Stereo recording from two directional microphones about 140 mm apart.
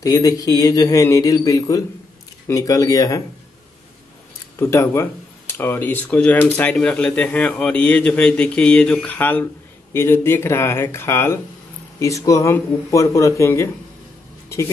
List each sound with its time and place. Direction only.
0.0 s speech: 25° left (ahead or behind)
4.6 s speech: 20° left (ahead or behind)